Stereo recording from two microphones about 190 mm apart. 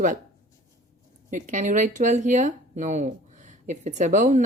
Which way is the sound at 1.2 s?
40° right (ahead or behind).